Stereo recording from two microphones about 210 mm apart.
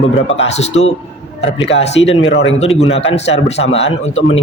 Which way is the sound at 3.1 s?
30° left (ahead or behind).